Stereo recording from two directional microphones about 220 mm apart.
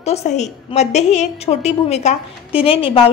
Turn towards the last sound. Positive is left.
turn(degrees=25)  # may be behind; listen again after turning